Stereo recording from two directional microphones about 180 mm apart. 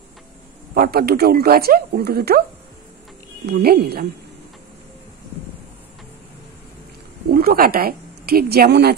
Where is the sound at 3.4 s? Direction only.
60° right (ahead or behind).